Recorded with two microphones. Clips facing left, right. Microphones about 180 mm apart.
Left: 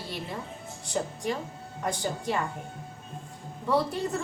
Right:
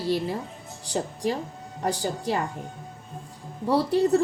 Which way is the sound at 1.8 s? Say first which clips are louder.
Right 4 dB; 35° right (ahead or behind).